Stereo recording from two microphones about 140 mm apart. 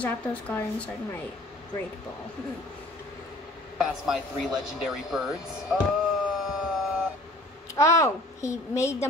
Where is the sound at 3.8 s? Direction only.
5° right (ahead or behind).